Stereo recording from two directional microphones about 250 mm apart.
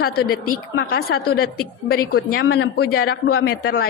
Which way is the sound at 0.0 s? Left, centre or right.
Left.